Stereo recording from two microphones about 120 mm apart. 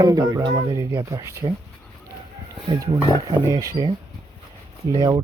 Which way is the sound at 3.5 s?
30° right (ahead or behind).